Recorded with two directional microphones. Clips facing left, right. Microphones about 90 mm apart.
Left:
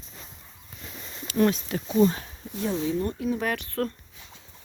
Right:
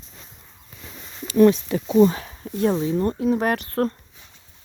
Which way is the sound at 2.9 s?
40° right (ahead or behind).